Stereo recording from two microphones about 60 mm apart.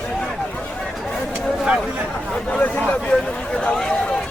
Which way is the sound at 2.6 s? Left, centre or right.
Left.